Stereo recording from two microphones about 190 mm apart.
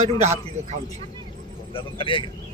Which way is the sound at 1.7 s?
25° left (ahead or behind).